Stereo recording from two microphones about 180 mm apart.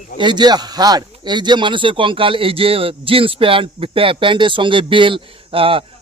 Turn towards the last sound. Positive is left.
turn(degrees=-30)  # may be behind; listen again after turning